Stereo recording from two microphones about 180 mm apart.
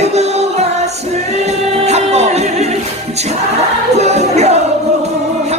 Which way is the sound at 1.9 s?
35° right (ahead or behind).